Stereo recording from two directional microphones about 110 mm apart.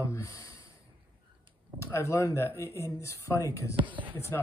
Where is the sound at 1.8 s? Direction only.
25° left (ahead or behind).